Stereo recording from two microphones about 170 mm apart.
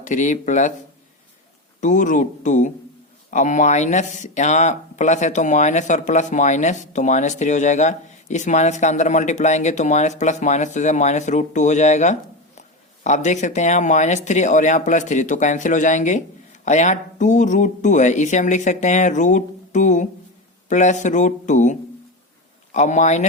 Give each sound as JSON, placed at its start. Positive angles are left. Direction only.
{"t": 0.0, "sound": "speech", "side_deg": 45}
{"t": 1.8, "sound": "speech", "side_deg": 45}